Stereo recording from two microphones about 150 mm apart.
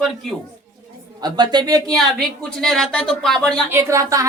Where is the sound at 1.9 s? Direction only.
5° left (ahead or behind).